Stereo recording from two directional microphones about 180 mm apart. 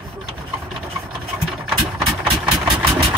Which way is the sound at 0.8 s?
Centre (ahead or behind).